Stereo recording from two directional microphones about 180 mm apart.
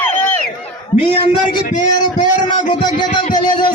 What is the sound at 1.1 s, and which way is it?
A man's voice, 30° left (ahead or behind).